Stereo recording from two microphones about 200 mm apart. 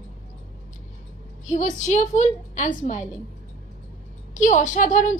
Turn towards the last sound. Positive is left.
turn(degrees=40)  # may be behind; listen again after turning